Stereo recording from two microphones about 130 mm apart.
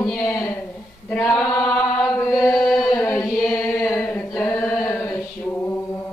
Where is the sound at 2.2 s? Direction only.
10° left (ahead or behind).